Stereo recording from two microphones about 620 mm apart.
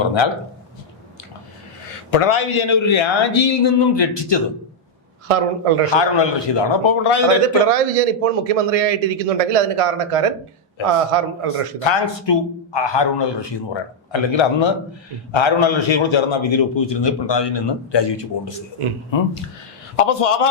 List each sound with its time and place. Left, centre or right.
0.0 s a man's voice: left
2.1 s a man's voice: left
5.3 s a man's voice: right
6.0 s a man's voice: left
7.7 s a man's voice: right
11.9 s a man's voice: left
20.0 s a man's voice: left